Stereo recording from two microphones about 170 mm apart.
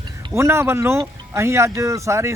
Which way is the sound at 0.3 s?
15° right (ahead or behind).